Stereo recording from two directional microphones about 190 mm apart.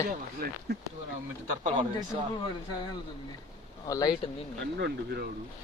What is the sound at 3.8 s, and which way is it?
Speech, 20° left (ahead or behind).